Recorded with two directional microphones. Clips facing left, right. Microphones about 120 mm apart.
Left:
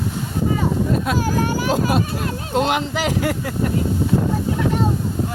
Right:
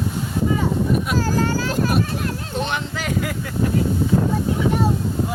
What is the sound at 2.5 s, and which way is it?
Speech, 90° left.